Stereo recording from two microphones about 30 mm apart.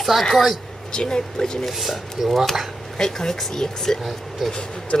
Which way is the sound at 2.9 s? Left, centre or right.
Centre.